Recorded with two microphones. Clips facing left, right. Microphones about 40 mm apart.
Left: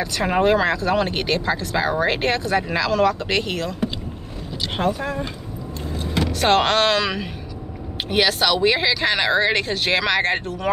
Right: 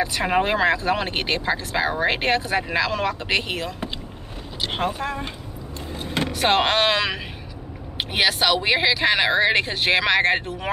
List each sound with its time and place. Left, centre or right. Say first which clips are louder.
0.0 s speech: left 2 dB; centre
4.9 s speech: left 1 dB; right
6.3 s speech: left 2 dB; centre